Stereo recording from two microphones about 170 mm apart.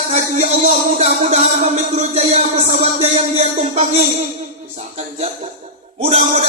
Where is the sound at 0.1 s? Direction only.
40° right (ahead or behind).